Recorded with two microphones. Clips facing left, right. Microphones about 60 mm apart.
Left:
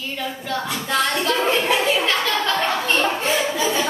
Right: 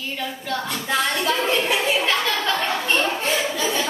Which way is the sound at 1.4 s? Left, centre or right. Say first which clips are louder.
Left 2 dB; left.